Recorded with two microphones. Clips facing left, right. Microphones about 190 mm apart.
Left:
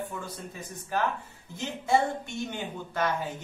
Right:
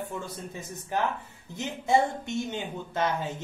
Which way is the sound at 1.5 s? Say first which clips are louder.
Right 1 dB; 20° right (ahead or behind).